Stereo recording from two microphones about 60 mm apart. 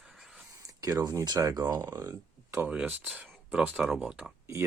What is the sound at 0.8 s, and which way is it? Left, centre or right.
Speech, right.